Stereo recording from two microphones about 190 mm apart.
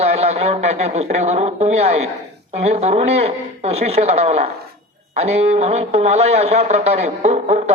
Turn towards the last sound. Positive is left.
turn(degrees=-35)  # may be behind; listen again after turning